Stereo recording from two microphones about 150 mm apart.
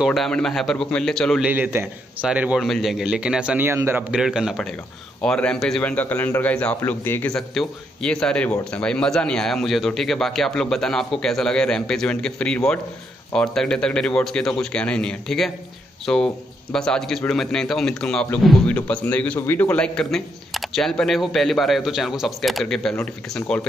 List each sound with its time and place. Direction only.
0.0 s a man's voice: centre (ahead or behind)
1.4 s a man's voice: 10° right (ahead or behind)
4.1 s a man's voice: 5° right (ahead or behind)